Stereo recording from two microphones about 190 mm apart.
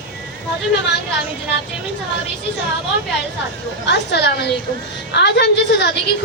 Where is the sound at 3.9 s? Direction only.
60° left (ahead or behind).